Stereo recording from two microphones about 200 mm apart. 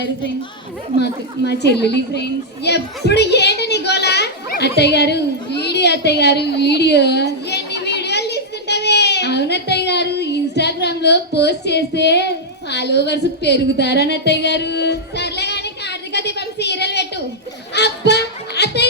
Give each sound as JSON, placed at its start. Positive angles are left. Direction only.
{"t": 0.9, "sound": "a woman's voice", "side_deg": 55}
{"t": 17.7, "sound": "music", "side_deg": 55}